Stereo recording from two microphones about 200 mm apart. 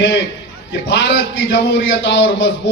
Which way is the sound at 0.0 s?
65° left (ahead or behind).